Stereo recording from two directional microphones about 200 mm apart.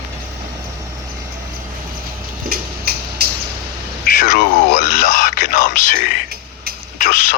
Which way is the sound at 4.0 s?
45° left (ahead or behind).